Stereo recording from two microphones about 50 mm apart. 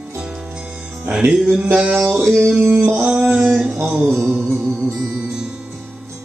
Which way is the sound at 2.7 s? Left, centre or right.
Right.